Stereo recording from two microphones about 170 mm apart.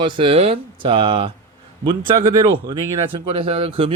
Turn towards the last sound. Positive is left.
turn(degrees=-30)  # may be behind; listen again after turning